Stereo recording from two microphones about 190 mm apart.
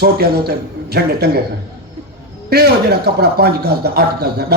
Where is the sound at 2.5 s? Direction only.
60° right (ahead or behind).